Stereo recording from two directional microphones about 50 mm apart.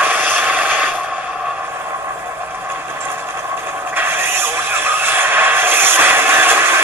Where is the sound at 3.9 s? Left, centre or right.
Right.